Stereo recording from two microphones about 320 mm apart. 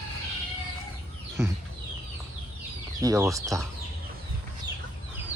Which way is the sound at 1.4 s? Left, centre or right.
Centre.